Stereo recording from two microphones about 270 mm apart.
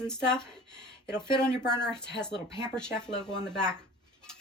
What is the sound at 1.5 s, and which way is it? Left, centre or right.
Speech, centre.